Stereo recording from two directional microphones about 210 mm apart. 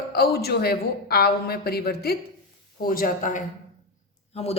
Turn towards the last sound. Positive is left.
turn(degrees=30)  # may be behind; listen again after turning